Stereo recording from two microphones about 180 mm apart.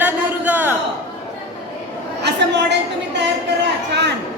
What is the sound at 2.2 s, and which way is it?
Chatter, 70° right (ahead or behind).